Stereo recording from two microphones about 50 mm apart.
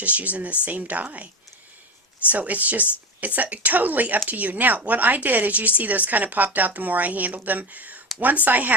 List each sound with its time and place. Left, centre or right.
0.0 s speech: right
2.3 s speech: right